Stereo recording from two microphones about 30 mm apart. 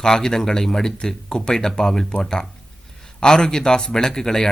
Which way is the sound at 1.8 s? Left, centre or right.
Centre.